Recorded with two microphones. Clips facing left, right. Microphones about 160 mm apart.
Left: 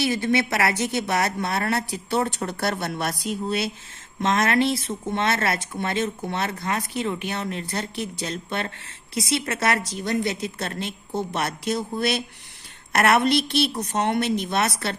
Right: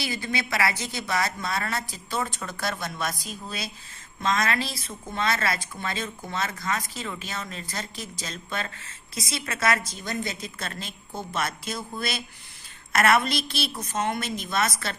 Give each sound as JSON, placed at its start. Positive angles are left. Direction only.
{"t": 0.0, "sound": "a woman's voice", "side_deg": 65}